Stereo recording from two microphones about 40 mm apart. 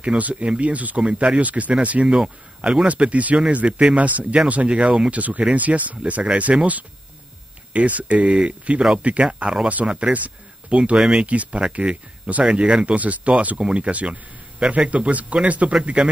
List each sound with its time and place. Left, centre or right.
0.2 s speech: right
1.4 s speech: right
2.9 s speech: right
4.6 s speech: right
5.1 s speech: right
7.7 s speech: right
9.3 s speech: right
12.8 s speech: right